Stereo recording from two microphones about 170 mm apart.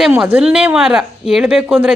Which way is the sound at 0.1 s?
10° right (ahead or behind).